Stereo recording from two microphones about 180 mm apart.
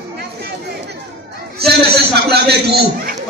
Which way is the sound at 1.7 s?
65° right (ahead or behind).